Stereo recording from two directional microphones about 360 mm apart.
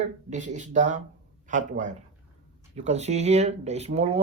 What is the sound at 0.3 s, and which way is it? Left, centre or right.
Speech, centre.